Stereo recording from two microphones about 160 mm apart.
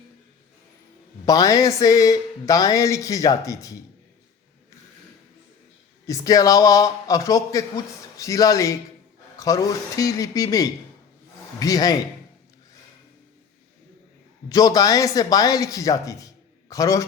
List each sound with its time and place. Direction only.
1.2 s speech: 20° left (ahead or behind)
6.1 s speech: 20° left (ahead or behind)
14.5 s speech: 20° left (ahead or behind)